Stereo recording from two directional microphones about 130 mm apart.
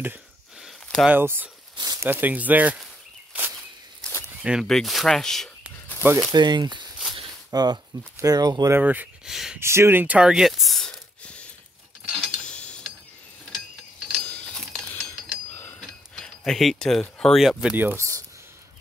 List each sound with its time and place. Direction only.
1.0 s speech: 15° right (ahead or behind)
1.8 s speech: 30° right (ahead or behind)
2.0 s speech: 15° right (ahead or behind)
3.3 s a sound: 10° right (ahead or behind)
4.4 s speech: 5° right (ahead or behind)
6.3 s speech: 35° right (ahead or behind)
8.7 s a sound: 15° right (ahead or behind)
9.6 s a sound: 20° right (ahead or behind); by 11.5 s 10° left (ahead or behind)
12.1 s mechanisms: 5° left (ahead or behind)
14.1 s a sound: 10° left (ahead or behind)
16.2 s speech: 5° left (ahead or behind)
17.7 s speech: 15° right (ahead or behind)